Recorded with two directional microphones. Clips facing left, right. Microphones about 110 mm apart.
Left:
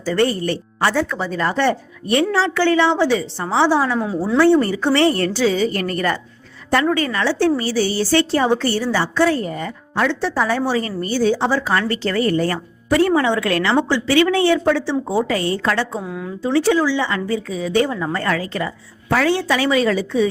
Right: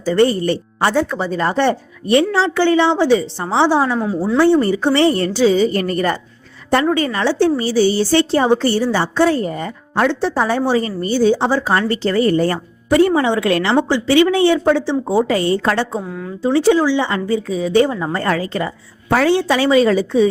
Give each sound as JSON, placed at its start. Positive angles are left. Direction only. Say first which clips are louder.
{"t": 0.0, "sound": "a woman's voice", "louder": "right 4 dB", "side_deg": -20}
{"t": 4.0, "sound": "speech", "louder": "right 2 dB", "side_deg": 0}
{"t": 4.4, "sound": "a woman's voice", "louder": "right 1 dB", "side_deg": -20}
{"t": 15.3, "sound": "a woman's voice", "louder": "right 3 dB", "side_deg": -30}
{"t": 16.0, "sound": "speech", "louder": "right 2 dB", "side_deg": 5}
{"t": 16.4, "sound": "a woman's voice", "louder": "right 3 dB", "side_deg": -25}